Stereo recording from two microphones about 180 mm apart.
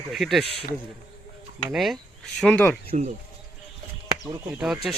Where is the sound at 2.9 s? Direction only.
40° right (ahead or behind).